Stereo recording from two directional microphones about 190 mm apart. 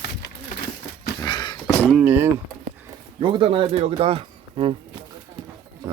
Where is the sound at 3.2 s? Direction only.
25° right (ahead or behind).